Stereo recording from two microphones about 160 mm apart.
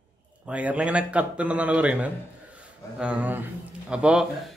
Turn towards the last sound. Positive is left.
turn(degrees=-5)  # may be behind; listen again after turning